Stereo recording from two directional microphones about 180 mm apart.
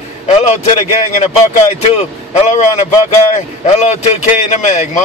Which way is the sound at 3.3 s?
40° left (ahead or behind).